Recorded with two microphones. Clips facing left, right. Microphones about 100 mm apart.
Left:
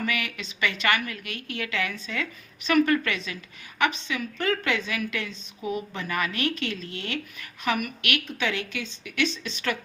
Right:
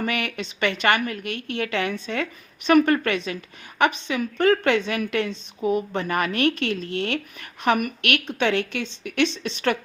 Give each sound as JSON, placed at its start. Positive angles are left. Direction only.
{"t": 0.0, "sound": "a sound", "side_deg": -50}
{"t": 0.3, "sound": "speech", "side_deg": -55}
{"t": 0.9, "sound": "a woman's voice", "side_deg": -40}
{"t": 2.6, "sound": "a woman's voice", "side_deg": -45}
{"t": 7.6, "sound": "a woman's voice", "side_deg": -45}
{"t": 8.2, "sound": "speech", "side_deg": -65}